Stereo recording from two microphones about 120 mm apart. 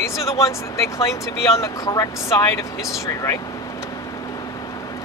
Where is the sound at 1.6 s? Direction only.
30° left (ahead or behind).